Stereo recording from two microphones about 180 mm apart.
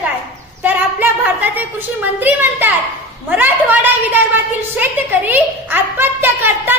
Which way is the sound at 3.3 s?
10° right (ahead or behind).